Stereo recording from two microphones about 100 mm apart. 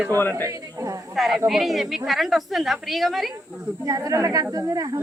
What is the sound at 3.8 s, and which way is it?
A woman's voice, 35° right (ahead or behind).